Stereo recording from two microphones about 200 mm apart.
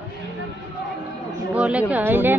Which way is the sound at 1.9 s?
10° right (ahead or behind).